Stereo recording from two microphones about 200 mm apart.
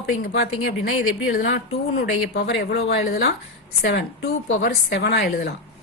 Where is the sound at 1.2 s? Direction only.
45° left (ahead or behind).